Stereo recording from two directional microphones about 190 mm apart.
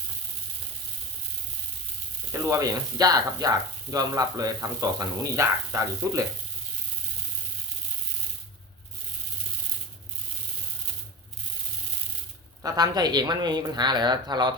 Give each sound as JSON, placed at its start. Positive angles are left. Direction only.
{"t": 2.3, "sound": "speech", "side_deg": -15}
{"t": 12.6, "sound": "speech", "side_deg": -20}